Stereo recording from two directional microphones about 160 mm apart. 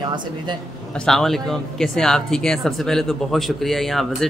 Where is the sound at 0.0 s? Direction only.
30° right (ahead or behind).